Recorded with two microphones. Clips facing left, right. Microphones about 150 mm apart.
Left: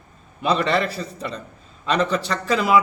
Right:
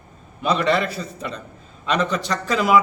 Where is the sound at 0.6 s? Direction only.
Centre (ahead or behind).